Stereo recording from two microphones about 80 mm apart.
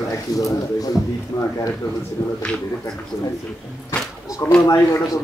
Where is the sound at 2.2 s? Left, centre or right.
Left.